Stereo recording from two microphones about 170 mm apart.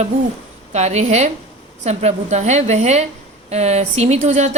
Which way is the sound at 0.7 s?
40° right (ahead or behind).